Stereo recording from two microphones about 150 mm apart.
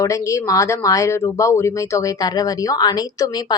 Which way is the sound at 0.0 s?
20° left (ahead or behind).